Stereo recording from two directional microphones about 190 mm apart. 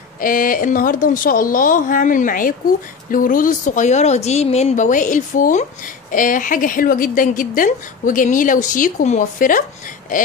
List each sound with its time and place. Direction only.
0.2 s a woman's voice: 45° left (ahead or behind)